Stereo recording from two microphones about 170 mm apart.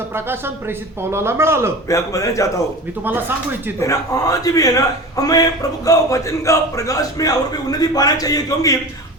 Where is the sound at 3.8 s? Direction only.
20° left (ahead or behind).